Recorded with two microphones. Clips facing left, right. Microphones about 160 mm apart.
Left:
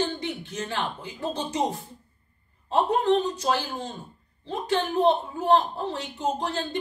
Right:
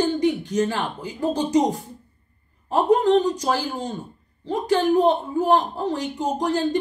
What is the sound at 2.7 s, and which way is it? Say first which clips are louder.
Speech: right 5 dB; 10° right (ahead or behind).